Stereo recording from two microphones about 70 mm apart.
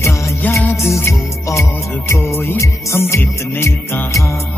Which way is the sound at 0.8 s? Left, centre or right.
Left.